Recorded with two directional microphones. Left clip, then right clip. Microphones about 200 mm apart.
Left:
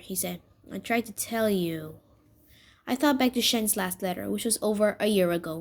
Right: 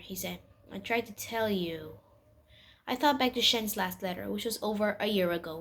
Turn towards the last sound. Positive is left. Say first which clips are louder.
# left 5 dB
turn(degrees=50)  # may be behind; listen again after turning